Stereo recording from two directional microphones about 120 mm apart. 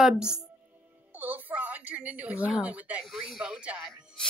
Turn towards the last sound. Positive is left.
turn(degrees=-10)  # may be behind; listen again after turning